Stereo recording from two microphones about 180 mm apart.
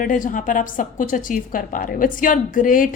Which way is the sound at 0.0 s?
45° left (ahead or behind).